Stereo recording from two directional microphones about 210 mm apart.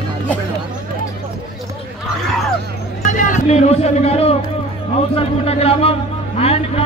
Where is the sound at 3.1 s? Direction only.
35° left (ahead or behind).